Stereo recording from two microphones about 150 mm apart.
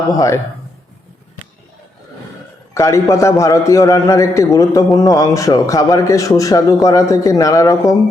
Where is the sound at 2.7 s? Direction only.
20° left (ahead or behind).